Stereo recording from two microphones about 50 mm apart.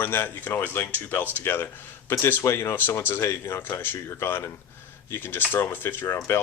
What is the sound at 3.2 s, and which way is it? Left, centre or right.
Speech, left.